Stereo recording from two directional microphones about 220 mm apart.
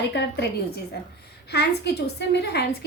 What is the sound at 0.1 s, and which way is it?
Speech, 50° left (ahead or behind).